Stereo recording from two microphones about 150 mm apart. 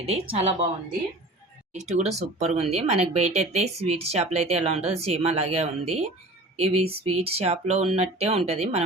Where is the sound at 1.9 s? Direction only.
45° right (ahead or behind).